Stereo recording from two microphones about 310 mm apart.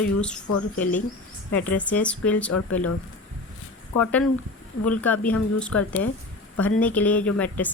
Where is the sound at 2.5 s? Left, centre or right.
Left.